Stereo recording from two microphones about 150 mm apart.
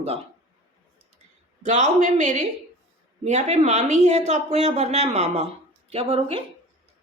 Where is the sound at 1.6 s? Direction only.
50° right (ahead or behind).